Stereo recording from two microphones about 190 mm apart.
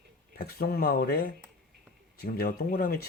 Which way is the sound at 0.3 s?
55° left (ahead or behind).